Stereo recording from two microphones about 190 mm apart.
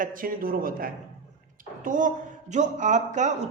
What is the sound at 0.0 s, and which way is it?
A woman's voice, 45° right (ahead or behind).